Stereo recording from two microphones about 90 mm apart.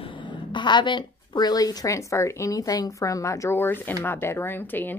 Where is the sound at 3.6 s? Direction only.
25° left (ahead or behind).